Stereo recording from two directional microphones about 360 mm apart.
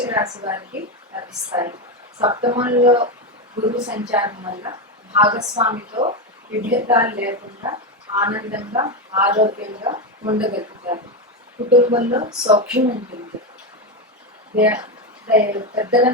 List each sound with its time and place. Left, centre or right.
0.0 s a woman's voice: centre
6.5 s speech: right
6.8 s a woman's voice: centre
11.7 s a woman's voice: centre
14.6 s a woman's voice: centre